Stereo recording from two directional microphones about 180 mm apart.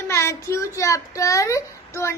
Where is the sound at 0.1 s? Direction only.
15° left (ahead or behind).